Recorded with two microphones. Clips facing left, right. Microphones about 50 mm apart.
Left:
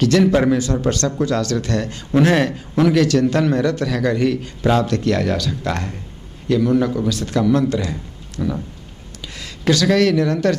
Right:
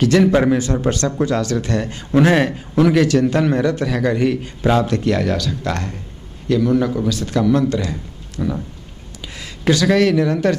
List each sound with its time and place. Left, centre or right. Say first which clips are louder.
0.0 s speech: right 1 dB; centre
5.2 s speech: even; centre
8.4 s speech: even; centre